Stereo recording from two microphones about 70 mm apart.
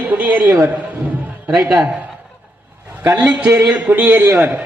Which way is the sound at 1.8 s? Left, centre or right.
Right.